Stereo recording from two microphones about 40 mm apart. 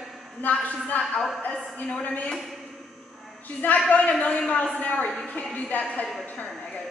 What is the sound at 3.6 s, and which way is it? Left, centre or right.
Speech, left.